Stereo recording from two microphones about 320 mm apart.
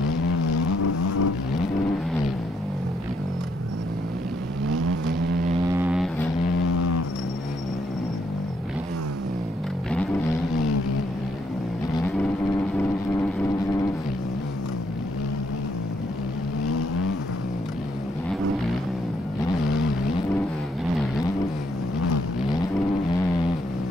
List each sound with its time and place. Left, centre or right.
0.7 s vehicle: left
4.6 s vehicle: right
5.7 s vehicle: centre
6.6 s vehicle: left
12.7 s vehicle: centre
16.6 s vehicle: left